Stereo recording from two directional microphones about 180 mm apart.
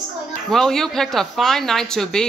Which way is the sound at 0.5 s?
5° left (ahead or behind).